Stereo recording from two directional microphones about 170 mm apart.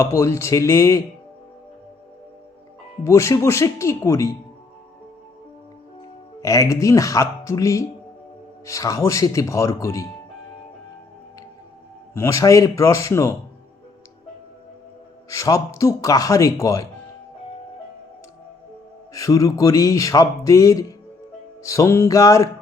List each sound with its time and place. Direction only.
0.0 s speech: 15° left (ahead or behind)
3.0 s speech: 15° left (ahead or behind)
6.4 s speech: 20° left (ahead or behind)
12.1 s speech: 15° left (ahead or behind)
15.3 s speech: 20° left (ahead or behind)
19.1 s speech: 20° left (ahead or behind)